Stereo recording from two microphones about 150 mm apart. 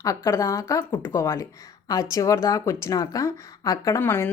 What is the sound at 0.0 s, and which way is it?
Speech, 20° left (ahead or behind).